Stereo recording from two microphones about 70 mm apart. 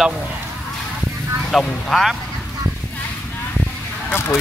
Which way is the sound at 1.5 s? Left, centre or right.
Centre.